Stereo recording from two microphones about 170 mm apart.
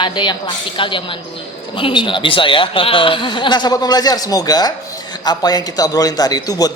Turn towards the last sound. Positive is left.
turn(degrees=20)  # may be behind; listen again after turning